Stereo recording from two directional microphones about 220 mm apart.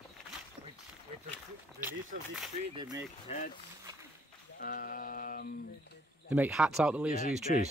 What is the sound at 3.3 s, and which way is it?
Speech, 30° left (ahead or behind).